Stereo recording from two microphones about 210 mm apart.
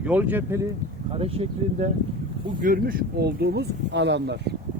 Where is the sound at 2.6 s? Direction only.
40° right (ahead or behind).